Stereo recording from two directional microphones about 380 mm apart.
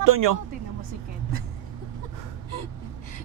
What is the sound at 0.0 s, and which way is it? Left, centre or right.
Speech, right.